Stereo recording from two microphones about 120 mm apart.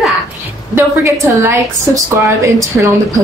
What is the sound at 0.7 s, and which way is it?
A woman's voice, 20° right (ahead or behind).